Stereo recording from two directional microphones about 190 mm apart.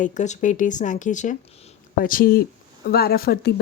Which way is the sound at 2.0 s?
50° left (ahead or behind).